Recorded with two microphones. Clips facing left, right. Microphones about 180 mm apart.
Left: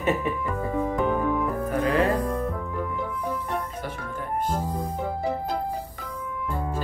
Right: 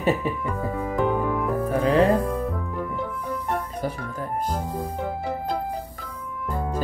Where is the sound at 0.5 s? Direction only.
Centre (ahead or behind).